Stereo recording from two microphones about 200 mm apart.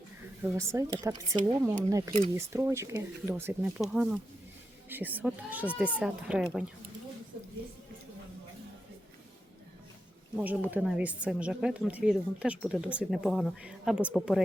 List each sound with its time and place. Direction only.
0.5 s a woman's voice: 15° right (ahead or behind)
10.3 s a woman's voice: 10° right (ahead or behind)